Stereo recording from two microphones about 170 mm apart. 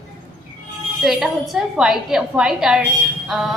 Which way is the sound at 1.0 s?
Centre (ahead or behind).